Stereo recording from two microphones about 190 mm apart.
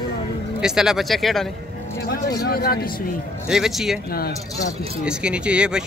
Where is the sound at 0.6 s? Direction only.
5° right (ahead or behind).